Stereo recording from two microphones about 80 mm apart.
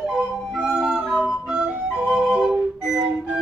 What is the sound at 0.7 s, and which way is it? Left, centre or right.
Music, centre.